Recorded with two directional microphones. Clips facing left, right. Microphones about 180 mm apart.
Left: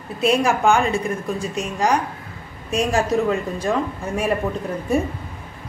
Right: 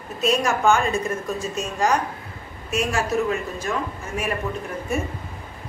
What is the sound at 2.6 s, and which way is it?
A man's voice, 35° left (ahead or behind).